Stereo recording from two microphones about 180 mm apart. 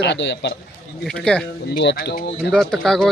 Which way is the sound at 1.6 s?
70° left (ahead or behind).